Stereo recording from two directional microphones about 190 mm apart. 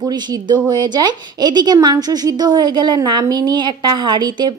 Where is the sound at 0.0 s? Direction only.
20° right (ahead or behind).